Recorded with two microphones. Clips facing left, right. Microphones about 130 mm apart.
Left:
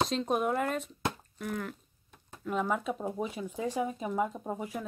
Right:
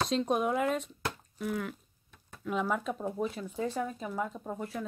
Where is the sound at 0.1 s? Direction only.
Centre (ahead or behind).